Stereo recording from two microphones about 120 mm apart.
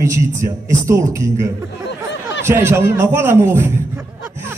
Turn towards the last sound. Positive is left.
turn(degrees=-20)  # may be behind; listen again after turning